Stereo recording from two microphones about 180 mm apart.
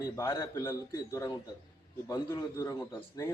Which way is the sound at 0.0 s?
20° left (ahead or behind).